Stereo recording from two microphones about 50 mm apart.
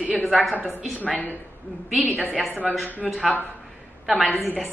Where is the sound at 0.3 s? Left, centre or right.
Right.